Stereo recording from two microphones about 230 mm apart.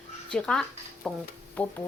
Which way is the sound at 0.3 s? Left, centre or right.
Centre.